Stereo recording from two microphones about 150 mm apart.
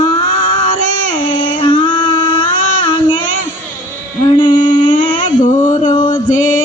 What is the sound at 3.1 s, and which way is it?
Child singing, 60° left (ahead or behind).